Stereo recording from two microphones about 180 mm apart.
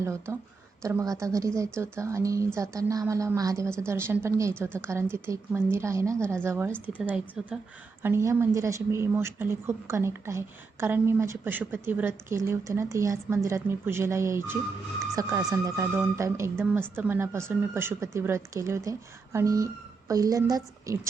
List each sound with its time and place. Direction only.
0.0 s a woman's voice: 15° right (ahead or behind)